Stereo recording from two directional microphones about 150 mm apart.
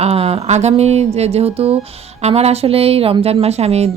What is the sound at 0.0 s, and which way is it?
A woman's voice, 40° right (ahead or behind).